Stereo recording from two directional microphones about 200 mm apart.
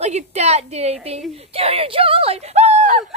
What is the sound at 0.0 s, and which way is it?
A woman's voice, 35° right (ahead or behind).